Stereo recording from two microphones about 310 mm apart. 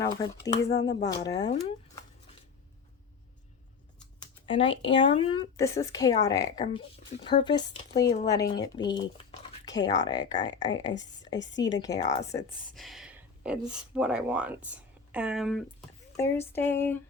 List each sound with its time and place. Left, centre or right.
0.0 s speech: centre
4.4 s speech: centre